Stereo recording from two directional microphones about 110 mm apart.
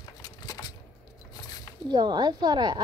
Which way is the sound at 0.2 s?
35° left (ahead or behind).